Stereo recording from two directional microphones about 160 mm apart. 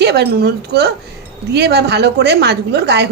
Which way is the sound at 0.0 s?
85° right.